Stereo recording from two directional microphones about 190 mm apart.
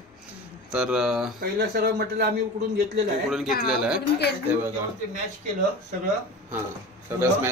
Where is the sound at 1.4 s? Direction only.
55° right (ahead or behind).